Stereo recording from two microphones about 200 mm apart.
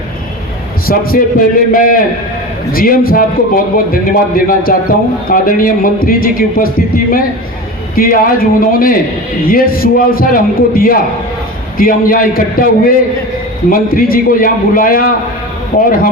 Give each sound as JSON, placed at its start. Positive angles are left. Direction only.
{"t": 0.9, "sound": "a man's voice", "side_deg": 45}
{"t": 13.7, "sound": "a man's voice", "side_deg": 45}